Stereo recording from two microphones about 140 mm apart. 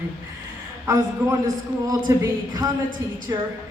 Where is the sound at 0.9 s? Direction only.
20° right (ahead or behind).